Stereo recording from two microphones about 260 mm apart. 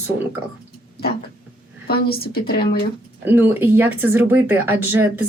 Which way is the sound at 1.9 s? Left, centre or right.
Left.